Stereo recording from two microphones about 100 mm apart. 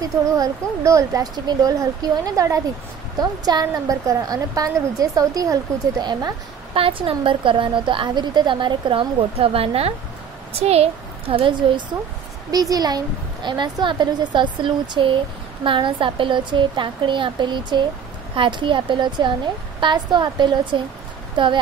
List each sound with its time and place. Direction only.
0.0 s a woman's voice: 35° right (ahead or behind)
6.7 s a woman's voice: 65° right (ahead or behind)
10.6 s a woman's voice: 90° right; by 11.8 s 55° right (ahead or behind)
12.4 s a woman's voice: 40° right (ahead or behind); by 21.5 s 55° right (ahead or behind)